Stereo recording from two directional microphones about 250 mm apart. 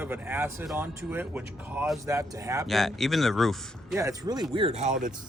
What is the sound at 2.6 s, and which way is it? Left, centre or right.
Speech, centre.